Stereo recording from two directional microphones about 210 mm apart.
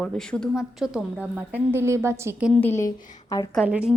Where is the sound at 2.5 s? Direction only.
10° left (ahead or behind).